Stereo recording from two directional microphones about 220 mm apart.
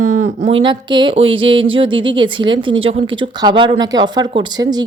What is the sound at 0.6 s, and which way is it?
A woman's voice, 20° right (ahead or behind).